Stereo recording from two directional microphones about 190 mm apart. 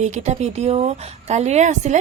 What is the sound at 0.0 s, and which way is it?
A woman's voice, 35° right (ahead or behind).